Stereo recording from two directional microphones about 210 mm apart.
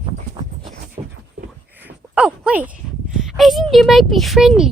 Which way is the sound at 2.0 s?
5° left (ahead or behind).